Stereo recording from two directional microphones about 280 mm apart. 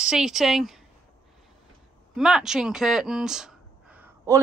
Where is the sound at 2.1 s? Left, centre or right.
Centre.